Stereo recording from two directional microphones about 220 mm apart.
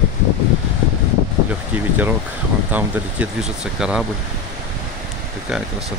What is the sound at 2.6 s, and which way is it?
Speech, 5° right (ahead or behind).